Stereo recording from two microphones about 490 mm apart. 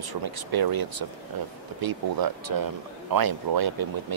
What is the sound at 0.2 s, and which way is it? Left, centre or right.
Speech, right.